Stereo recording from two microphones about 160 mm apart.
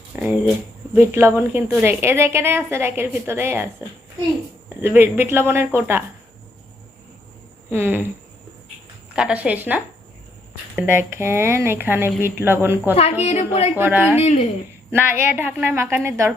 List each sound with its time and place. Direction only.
0.2 s a sound: 5° right (ahead or behind)
0.9 s a woman's voice: 15° right (ahead or behind)
4.8 s a woman's voice: 15° right (ahead or behind)
7.7 s a woman's voice: 10° right (ahead or behind)
9.1 s a woman's voice: 5° right (ahead or behind)
13.2 s a woman's voice: 40° left (ahead or behind)
13.7 s a woman's voice: 15° right (ahead or behind)
14.2 s a woman's voice: 40° left (ahead or behind)
14.8 s a woman's voice: 15° right (ahead or behind)